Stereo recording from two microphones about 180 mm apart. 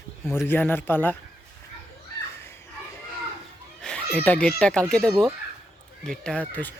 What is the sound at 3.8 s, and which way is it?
A child's voice, 5° left (ahead or behind).